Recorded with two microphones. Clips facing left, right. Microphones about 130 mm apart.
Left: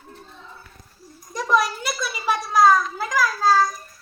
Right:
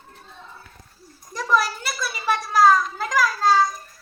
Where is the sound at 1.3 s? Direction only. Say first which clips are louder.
Left 1 dB; centre (ahead or behind).